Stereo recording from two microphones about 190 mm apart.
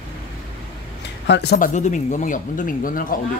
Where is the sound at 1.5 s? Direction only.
40° left (ahead or behind).